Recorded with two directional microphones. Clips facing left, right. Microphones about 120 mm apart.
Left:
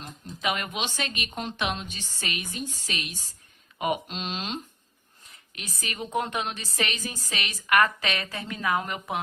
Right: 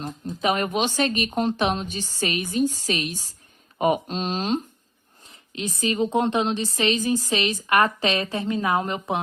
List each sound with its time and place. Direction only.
0.0 s speech: 40° right (ahead or behind)
5.2 s a woman's voice: 25° right (ahead or behind)